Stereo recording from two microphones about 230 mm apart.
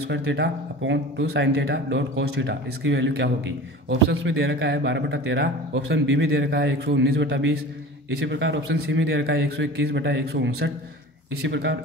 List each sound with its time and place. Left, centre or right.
0.1 s a man's voice: right